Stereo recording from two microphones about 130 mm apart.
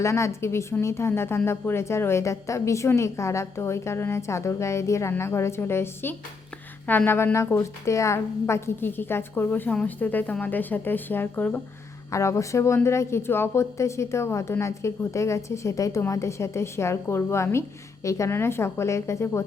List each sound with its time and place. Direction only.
0.0 s a woman's voice: 20° left (ahead or behind)
12.1 s a woman's voice: 25° left (ahead or behind)